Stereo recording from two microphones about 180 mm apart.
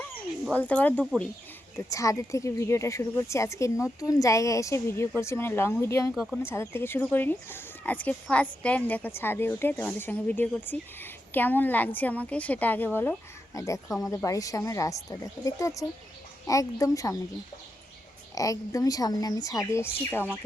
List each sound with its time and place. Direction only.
0.5 s speech: 10° left (ahead or behind)
13.8 s speech: centre (ahead or behind)
14.1 s speech: 20° left (ahead or behind)
18.3 s speech: 20° left (ahead or behind)